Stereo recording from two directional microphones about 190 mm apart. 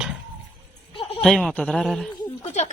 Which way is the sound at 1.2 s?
Centre (ahead or behind).